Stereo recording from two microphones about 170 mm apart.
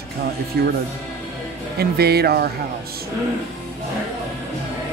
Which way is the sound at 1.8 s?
70° right (ahead or behind).